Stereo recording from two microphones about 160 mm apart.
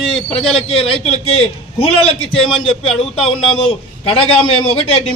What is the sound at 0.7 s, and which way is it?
A man's voice, 35° left (ahead or behind).